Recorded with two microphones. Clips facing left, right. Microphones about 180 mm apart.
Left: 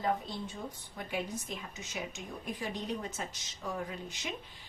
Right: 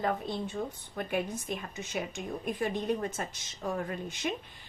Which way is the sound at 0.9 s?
55° right (ahead or behind).